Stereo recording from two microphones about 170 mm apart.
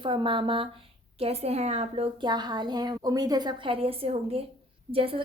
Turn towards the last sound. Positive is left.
turn(degrees=-35)  # may be behind; listen again after turning